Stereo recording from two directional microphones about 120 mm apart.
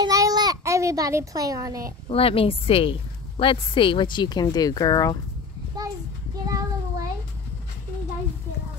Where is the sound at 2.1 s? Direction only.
55° left (ahead or behind); by 5.1 s 30° left (ahead or behind).